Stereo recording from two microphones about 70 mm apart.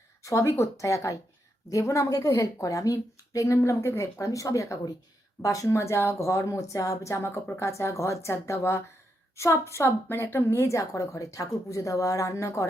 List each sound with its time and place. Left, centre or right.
0.2 s a woman's voice: left